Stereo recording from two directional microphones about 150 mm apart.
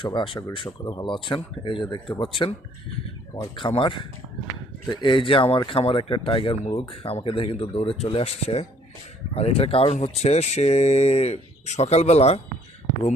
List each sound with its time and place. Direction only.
0.0 s speech: 35° left (ahead or behind)